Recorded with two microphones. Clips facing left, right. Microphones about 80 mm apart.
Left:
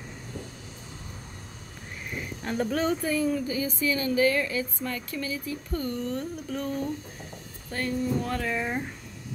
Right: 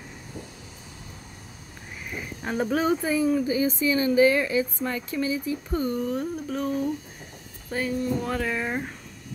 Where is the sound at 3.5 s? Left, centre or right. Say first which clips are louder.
Right 5 dB; right; by 8.8 s centre.